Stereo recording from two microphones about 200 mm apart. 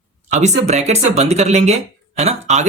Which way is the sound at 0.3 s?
35° right (ahead or behind).